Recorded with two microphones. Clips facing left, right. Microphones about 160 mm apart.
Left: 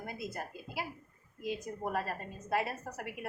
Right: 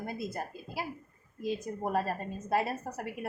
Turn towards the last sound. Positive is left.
turn(degrees=-30)  # may be behind; listen again after turning